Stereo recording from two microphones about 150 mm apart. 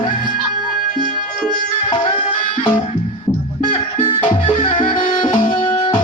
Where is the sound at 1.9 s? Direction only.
35° left (ahead or behind).